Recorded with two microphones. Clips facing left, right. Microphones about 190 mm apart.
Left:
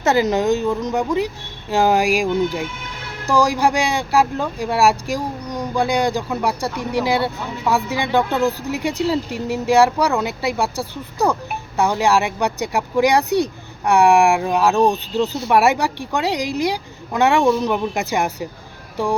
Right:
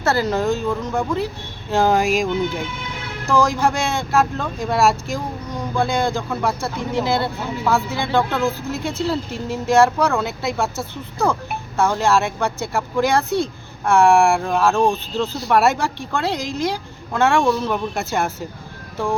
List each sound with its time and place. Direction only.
0.0 s speech: 20° left (ahead or behind)
3.2 s speech: 15° left (ahead or behind)
11.8 s speech: 15° left (ahead or behind)